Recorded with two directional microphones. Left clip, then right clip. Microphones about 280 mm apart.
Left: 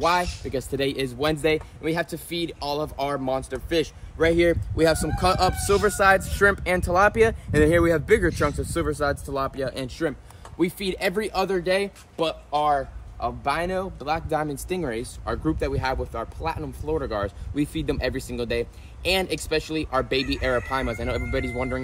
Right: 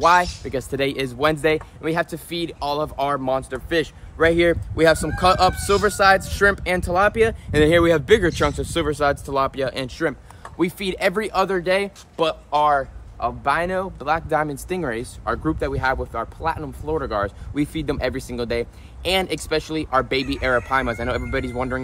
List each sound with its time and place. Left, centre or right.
0.0 s speech: centre
7.8 s speech: centre
8.3 s speech: centre